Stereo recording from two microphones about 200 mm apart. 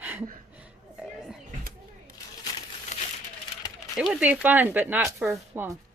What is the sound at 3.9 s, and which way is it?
A woman's voice, 5° right (ahead or behind).